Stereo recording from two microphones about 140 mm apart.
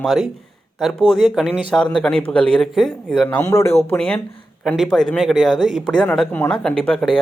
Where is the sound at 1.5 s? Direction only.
10° left (ahead or behind).